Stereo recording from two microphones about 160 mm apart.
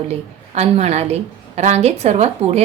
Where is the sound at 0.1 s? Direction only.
40° right (ahead or behind).